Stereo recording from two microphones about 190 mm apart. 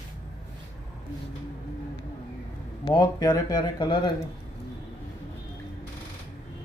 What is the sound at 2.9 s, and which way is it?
Speech, 20° left (ahead or behind).